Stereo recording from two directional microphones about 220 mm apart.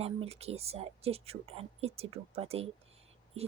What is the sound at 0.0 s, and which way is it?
Speech, 30° right (ahead or behind).